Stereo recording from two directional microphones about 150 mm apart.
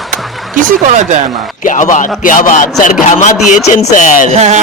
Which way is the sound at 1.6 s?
55° left (ahead or behind).